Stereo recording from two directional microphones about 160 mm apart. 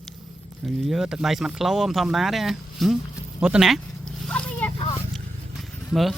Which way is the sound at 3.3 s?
5° right (ahead or behind).